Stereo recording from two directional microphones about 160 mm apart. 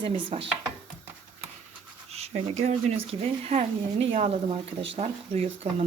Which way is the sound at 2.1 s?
40° right (ahead or behind).